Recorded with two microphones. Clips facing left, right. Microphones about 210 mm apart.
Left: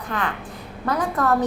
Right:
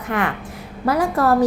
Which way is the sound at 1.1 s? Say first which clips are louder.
Right 4 dB; 30° right (ahead or behind).